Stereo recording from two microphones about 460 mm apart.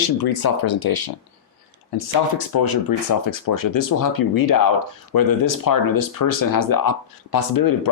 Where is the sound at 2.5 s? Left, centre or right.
Left.